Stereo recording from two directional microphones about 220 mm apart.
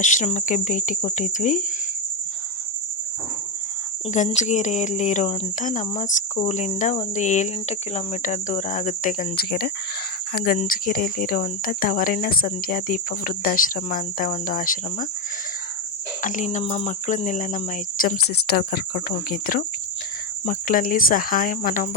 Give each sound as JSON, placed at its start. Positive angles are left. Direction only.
{"t": 0.0, "sound": "speech", "side_deg": 35}
{"t": 4.1, "sound": "speech", "side_deg": 35}
{"t": 16.2, "sound": "speech", "side_deg": 35}